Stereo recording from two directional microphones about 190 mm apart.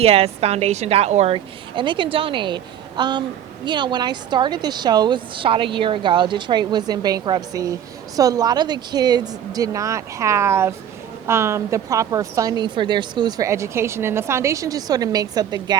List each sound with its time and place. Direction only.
0.0 s a woman's voice: 30° right (ahead or behind)